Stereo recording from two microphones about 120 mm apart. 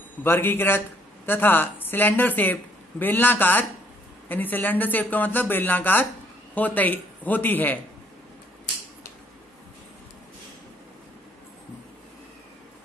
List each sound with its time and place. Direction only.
0.2 s speech: 20° left (ahead or behind)